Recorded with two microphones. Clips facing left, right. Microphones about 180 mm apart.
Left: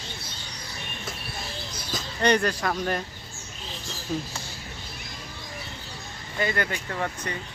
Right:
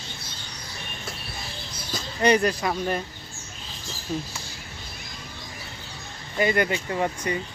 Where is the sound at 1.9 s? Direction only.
5° right (ahead or behind).